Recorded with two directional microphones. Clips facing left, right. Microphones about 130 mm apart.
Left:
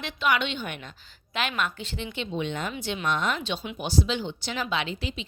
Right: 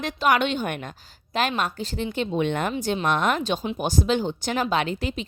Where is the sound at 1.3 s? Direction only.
40° right (ahead or behind); by 2.7 s 55° right (ahead or behind).